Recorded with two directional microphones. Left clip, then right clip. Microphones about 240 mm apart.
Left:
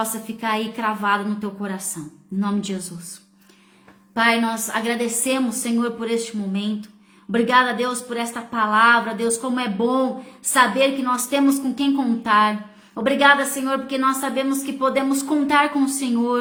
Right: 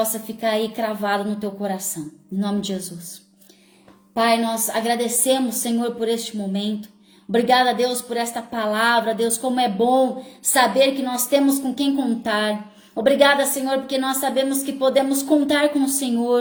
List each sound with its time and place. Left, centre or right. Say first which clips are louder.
0.0 s a woman's voice: right 3 dB; centre
4.2 s a woman's voice: even; centre